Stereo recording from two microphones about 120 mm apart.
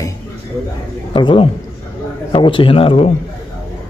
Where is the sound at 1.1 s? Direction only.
45° left (ahead or behind).